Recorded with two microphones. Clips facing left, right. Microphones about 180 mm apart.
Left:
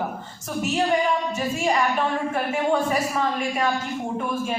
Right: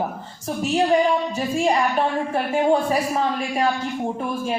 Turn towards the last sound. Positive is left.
turn(degrees=-35)  # may be behind; listen again after turning